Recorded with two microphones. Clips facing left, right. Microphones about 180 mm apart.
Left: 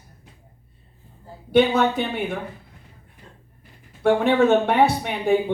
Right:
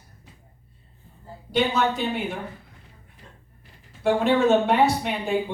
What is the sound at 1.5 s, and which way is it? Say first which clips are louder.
Speech: left 5 dB; 60° left (ahead or behind).